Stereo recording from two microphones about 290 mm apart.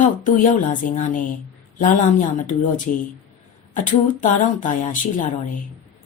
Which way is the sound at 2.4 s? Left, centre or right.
Left.